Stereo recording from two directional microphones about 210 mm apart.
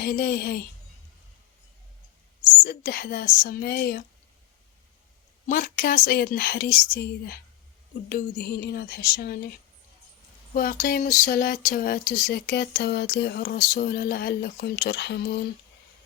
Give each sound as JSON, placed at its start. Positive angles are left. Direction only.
{"t": 0.0, "sound": "speech", "side_deg": 45}
{"t": 2.5, "sound": "speech", "side_deg": 40}
{"t": 5.5, "sound": "speech", "side_deg": 40}
{"t": 8.1, "sound": "speech", "side_deg": 45}
{"t": 10.5, "sound": "speech", "side_deg": 45}